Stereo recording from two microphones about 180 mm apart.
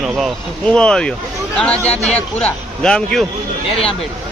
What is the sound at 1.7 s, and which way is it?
Speech, 35° left (ahead or behind).